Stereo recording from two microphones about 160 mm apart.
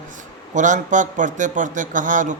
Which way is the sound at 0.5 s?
50° right (ahead or behind).